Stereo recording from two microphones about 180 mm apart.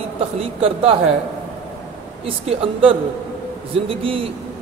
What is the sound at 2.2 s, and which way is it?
Speech, 35° right (ahead or behind).